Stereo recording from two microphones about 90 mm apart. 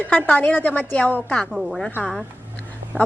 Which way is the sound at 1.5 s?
Centre (ahead or behind).